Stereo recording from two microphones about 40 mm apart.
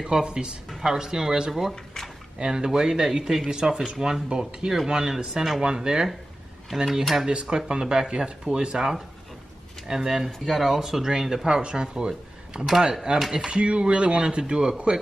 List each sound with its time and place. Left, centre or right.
0.0 s speech: centre
0.7 s speech: centre
0.9 s speech: centre
1.5 s speech: centre
2.3 s speech: centre
5.6 s speech: right
6.9 s speech: centre
7.2 s speech: right